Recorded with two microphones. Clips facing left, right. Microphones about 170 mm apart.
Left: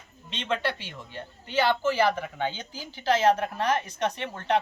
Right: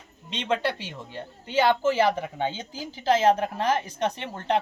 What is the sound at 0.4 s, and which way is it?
Speech, 30° right (ahead or behind).